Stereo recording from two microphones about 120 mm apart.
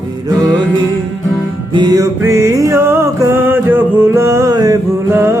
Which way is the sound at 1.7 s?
35° right (ahead or behind).